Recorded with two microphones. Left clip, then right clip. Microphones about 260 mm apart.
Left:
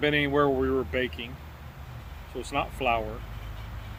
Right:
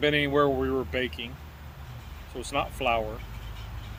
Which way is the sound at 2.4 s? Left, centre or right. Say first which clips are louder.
Even; centre.